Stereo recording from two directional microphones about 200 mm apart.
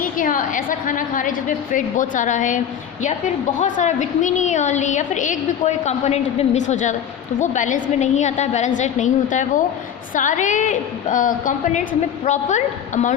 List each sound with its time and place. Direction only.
0.0 s a woman's voice: 40° left (ahead or behind)